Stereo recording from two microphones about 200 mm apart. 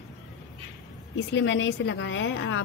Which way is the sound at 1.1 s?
65° left (ahead or behind).